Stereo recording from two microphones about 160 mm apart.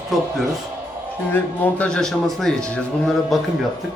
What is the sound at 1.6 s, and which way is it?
Speech, 5° left (ahead or behind).